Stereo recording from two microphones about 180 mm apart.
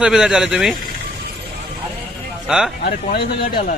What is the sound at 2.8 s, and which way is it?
Speech, 60° left (ahead or behind).